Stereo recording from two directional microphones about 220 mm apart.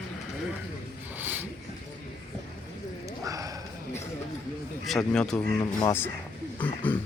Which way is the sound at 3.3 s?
15° right (ahead or behind).